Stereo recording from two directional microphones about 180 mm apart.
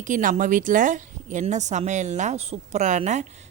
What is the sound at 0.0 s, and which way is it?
Speech, 45° right (ahead or behind).